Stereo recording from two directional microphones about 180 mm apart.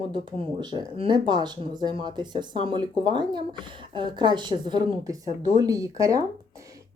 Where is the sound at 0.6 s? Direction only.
25° right (ahead or behind).